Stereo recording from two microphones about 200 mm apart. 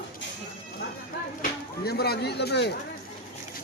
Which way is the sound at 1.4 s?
50° left (ahead or behind).